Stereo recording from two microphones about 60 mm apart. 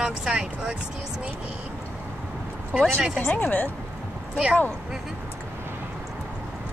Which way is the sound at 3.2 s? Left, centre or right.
Left.